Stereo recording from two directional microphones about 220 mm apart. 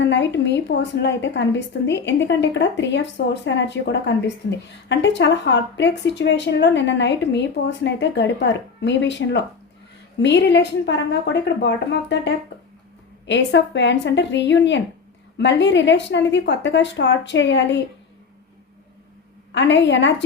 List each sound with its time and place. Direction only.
0.0 s speech: 55° left (ahead or behind)
19.5 s speech: 55° left (ahead or behind)